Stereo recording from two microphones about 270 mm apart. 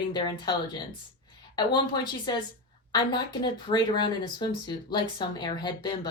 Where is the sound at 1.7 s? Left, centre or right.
Centre.